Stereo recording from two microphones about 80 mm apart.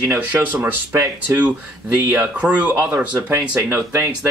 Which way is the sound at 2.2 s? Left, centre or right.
Centre.